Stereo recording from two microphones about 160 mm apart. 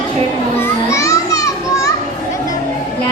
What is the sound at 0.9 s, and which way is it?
Children playing, 20° left (ahead or behind).